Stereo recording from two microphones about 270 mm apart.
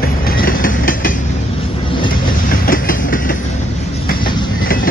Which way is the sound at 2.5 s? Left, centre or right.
Left.